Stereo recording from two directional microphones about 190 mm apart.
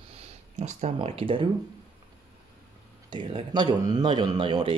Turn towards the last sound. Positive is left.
turn(degrees=-25)  # may be behind; listen again after turning